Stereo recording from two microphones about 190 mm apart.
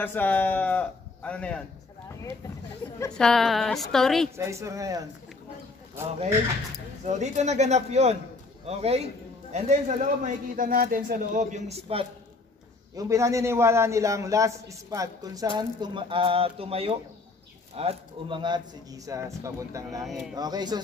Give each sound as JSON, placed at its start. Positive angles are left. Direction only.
{"t": 0.0, "sound": "speech", "side_deg": 10}
{"t": 3.2, "sound": "a woman's voice", "side_deg": 0}
{"t": 4.4, "sound": "speech", "side_deg": -15}
{"t": 7.1, "sound": "a man's voice", "side_deg": -35}
{"t": 12.9, "sound": "a man's voice", "side_deg": -15}